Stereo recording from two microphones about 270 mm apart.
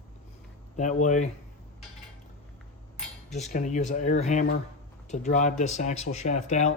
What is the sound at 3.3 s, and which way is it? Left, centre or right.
Speech, left.